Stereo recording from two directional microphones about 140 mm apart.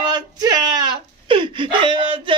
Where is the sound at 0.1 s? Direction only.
30° right (ahead or behind).